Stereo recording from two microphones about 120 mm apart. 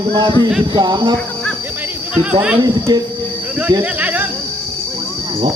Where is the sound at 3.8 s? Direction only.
15° right (ahead or behind).